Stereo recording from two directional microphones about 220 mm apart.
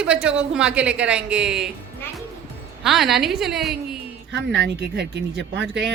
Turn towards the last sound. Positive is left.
turn(degrees=-50)  # may be behind; listen again after turning